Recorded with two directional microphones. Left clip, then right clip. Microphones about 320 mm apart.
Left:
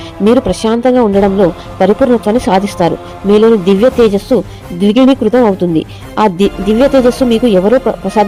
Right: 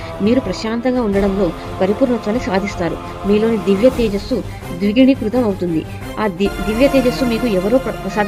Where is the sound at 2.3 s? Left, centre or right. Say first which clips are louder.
Left 8 dB; centre.